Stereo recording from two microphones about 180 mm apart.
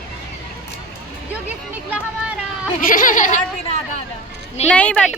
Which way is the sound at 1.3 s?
5° right (ahead or behind).